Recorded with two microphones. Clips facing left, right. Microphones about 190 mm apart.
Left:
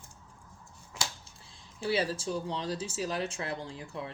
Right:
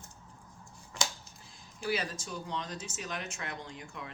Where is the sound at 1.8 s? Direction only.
30° left (ahead or behind).